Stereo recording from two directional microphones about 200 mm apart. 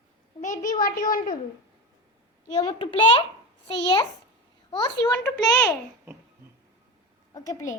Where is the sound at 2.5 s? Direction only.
20° left (ahead or behind).